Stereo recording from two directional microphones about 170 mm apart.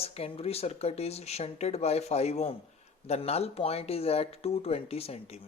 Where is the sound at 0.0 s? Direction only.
35° left (ahead or behind).